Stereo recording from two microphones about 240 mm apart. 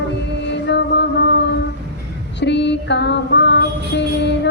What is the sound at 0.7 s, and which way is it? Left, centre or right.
Music, left.